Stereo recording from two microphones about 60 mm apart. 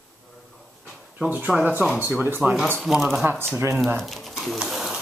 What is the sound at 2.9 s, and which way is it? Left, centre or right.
Speech, centre.